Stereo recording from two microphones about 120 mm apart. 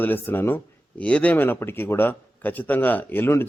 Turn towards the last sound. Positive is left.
turn(degrees=20)  # may be behind; listen again after turning